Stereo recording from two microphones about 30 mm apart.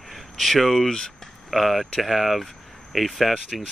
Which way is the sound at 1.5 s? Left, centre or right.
Centre.